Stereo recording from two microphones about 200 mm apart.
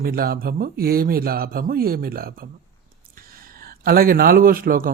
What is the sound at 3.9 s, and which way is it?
Speech, 45° right (ahead or behind).